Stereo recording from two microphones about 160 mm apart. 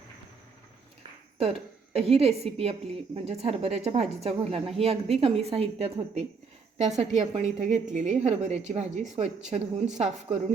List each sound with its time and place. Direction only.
1.4 s a woman's voice: 40° right (ahead or behind)